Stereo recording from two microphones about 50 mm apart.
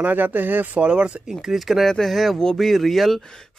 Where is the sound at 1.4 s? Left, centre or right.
Centre.